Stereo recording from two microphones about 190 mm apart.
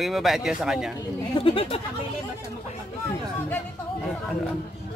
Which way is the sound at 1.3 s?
30° left (ahead or behind).